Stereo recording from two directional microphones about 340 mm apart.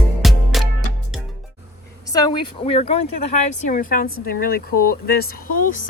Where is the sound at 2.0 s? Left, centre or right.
Centre; by 5.7 s left.